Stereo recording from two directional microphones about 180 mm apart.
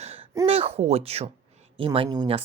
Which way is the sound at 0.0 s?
35° right (ahead or behind).